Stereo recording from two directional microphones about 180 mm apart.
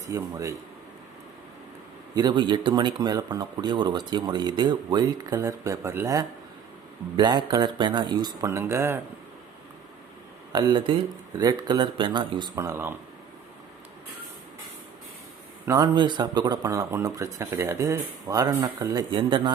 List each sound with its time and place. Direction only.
0.1 s speech: 20° right (ahead or behind)
2.1 s speech: 25° right (ahead or behind)
10.5 s speech: 25° right (ahead or behind)
15.6 s speech: 20° right (ahead or behind)